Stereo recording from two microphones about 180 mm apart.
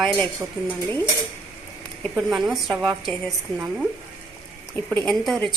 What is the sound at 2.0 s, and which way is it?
A woman's voice, centre (ahead or behind).